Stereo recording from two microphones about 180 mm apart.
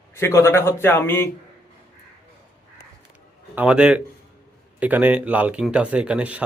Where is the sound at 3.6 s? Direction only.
5° right (ahead or behind).